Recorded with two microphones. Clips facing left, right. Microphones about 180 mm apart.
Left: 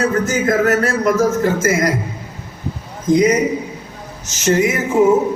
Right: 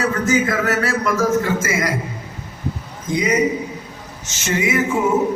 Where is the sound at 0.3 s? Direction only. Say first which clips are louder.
Left 3 dB; 45° left (ahead or behind).